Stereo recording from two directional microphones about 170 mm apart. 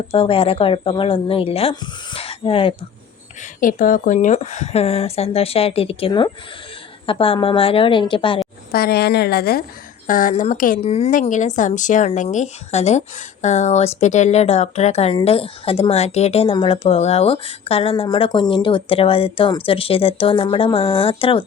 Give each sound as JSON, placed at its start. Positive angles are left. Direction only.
{"t": 0.1, "sound": "speech", "side_deg": 35}
{"t": 3.6, "sound": "speech", "side_deg": 55}
{"t": 8.7, "sound": "a woman's voice", "side_deg": 70}
{"t": 10.1, "sound": "a woman's voice", "side_deg": 50}
{"t": 10.8, "sound": "speech", "side_deg": 40}